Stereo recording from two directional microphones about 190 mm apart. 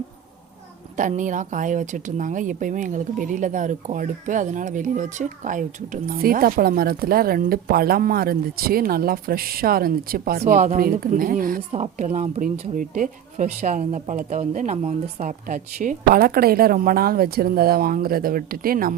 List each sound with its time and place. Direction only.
0.9 s speech: 40° right (ahead or behind)
10.4 s speech: 40° right (ahead or behind)
11.7 s speech: 40° right (ahead or behind)